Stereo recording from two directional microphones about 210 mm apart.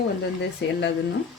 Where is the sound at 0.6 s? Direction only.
55° left (ahead or behind).